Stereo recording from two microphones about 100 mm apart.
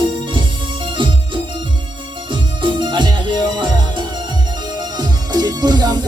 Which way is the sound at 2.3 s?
50° right (ahead or behind).